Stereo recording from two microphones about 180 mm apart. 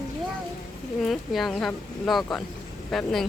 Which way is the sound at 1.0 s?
Centre (ahead or behind).